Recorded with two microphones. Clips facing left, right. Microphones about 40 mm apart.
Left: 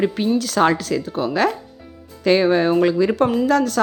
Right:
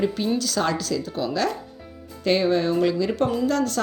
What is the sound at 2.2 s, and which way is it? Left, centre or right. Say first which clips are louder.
Speech: left 5 dB; left.